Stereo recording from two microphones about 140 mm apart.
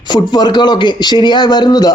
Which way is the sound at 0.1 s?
30° left (ahead or behind).